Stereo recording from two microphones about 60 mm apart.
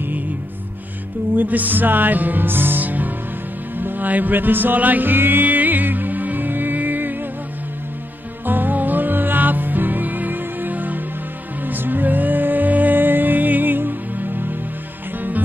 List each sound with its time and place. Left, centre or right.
1.3 s music: right
8.5 s music: right